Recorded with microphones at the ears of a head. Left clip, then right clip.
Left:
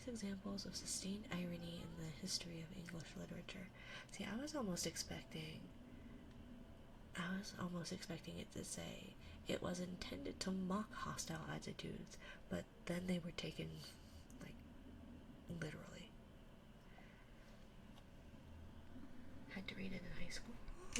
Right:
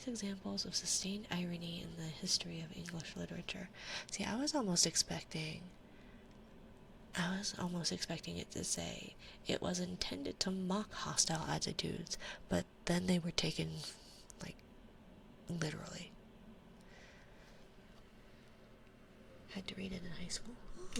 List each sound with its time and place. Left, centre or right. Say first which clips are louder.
0.0 s speech: right 5 dB; right
7.1 s speech: right 8 dB; right
15.4 s speech: right 8 dB; right
20.1 s speech: right 5 dB; right